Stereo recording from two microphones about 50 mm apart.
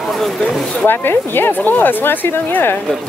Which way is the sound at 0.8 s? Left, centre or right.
Left.